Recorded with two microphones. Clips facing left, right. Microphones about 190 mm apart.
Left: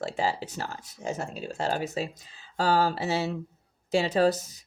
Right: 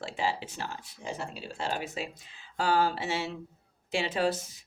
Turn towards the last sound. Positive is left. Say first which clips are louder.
# left 5 dB
turn(degrees=40)  # may be behind; listen again after turning